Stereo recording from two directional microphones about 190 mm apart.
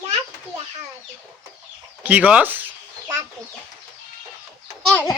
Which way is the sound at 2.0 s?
10° right (ahead or behind).